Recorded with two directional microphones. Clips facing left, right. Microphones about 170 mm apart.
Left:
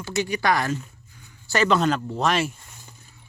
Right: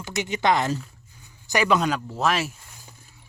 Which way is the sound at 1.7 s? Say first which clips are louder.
Left 1 dB; centre (ahead or behind).